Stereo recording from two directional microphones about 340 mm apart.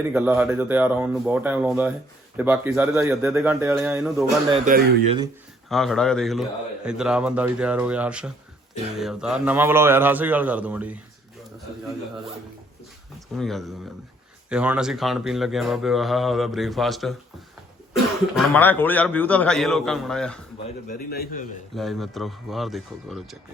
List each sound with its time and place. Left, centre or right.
0.1 s speech: centre
4.5 s speech: centre
5.6 s speech: centre
13.3 s speech: centre
18.3 s speech: centre
20.8 s a man's voice: left
21.8 s speech: centre